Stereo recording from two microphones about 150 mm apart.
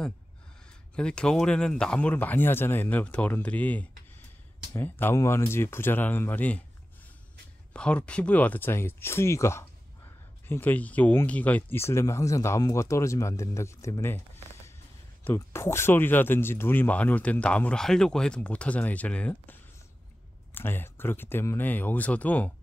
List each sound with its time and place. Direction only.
0.9 s speech: 5° left (ahead or behind)
7.7 s speech: 5° left (ahead or behind)
20.5 s speech: 15° left (ahead or behind)